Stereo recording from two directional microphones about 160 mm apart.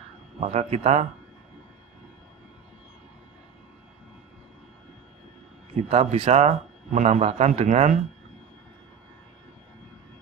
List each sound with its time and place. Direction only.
0.4 s a man's voice: 40° right (ahead or behind)
5.9 s a man's voice: 35° right (ahead or behind)